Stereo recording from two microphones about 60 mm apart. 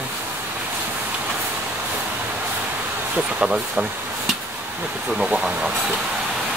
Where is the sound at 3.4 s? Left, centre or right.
Centre.